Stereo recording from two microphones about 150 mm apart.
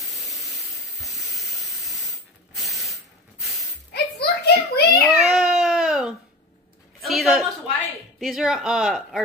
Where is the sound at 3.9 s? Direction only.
90° left.